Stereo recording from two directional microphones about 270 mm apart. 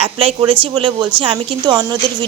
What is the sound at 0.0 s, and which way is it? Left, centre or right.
A woman's voice, right.